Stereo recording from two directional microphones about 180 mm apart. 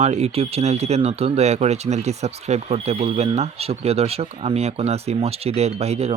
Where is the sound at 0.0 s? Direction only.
35° right (ahead or behind).